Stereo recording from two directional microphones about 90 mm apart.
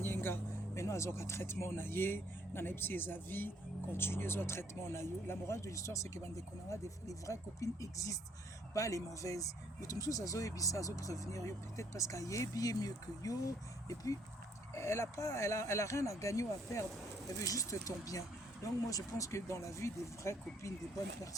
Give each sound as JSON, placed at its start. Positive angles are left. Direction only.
{"t": 0.0, "sound": "speech", "side_deg": 25}